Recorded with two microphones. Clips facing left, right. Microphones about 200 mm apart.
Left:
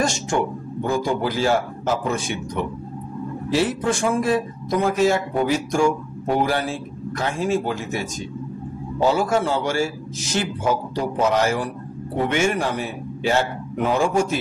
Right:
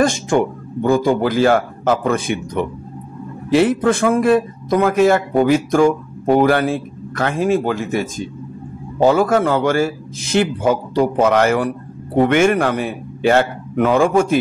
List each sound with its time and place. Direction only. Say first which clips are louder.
0.0 s a sound: right 7 dB; 55° right (ahead or behind)
0.8 s a man's voice: right 7 dB; 55° right (ahead or behind)
3.5 s a man's voice: right 7 dB; 60° right (ahead or behind)
9.0 s a man's voice: right 6 dB; 50° right (ahead or behind)